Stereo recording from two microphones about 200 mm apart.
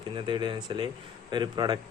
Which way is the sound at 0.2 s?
25° right (ahead or behind).